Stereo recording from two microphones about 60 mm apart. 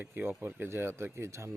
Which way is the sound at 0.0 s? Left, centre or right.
Right.